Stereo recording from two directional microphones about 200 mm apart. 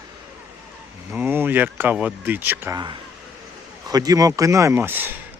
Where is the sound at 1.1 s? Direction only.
10° right (ahead or behind).